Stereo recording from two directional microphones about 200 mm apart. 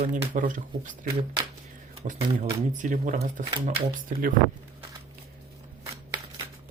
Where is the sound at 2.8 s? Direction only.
40° right (ahead or behind).